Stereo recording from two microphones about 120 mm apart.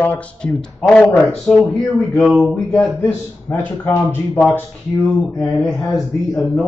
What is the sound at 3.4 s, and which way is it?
Speech, 20° left (ahead or behind).